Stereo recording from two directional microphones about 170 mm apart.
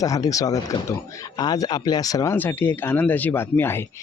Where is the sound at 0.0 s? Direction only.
20° left (ahead or behind).